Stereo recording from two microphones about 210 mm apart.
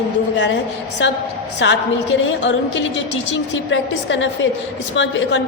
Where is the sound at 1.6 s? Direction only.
60° left (ahead or behind).